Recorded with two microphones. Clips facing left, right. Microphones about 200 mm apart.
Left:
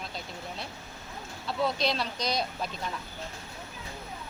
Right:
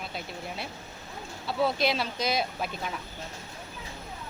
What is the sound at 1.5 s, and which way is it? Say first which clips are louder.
Speech: right 2 dB; 5° right (ahead or behind).